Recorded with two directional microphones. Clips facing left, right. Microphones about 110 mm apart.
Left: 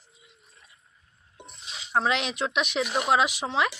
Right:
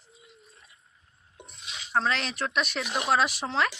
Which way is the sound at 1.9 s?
15° left (ahead or behind).